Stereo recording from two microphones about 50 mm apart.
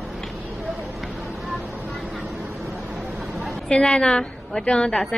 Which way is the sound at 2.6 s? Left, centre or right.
Centre.